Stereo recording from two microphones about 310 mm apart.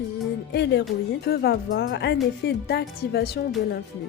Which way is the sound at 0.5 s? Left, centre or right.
Left.